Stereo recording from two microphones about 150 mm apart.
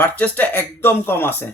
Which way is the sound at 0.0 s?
10° left (ahead or behind).